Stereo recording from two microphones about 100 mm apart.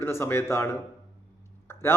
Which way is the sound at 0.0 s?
25° left (ahead or behind).